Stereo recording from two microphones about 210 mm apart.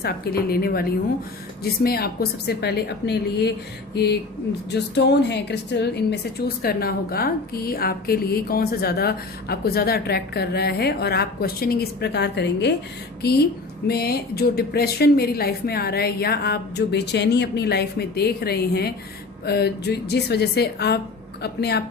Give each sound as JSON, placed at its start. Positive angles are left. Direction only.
{"t": 0.0, "sound": "a woman's voice", "side_deg": 45}